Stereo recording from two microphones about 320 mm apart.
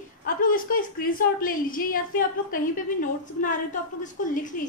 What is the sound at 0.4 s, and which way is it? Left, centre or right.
A woman's voice, left.